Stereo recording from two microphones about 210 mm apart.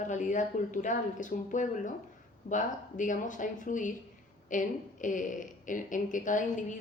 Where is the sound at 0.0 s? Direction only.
35° left (ahead or behind).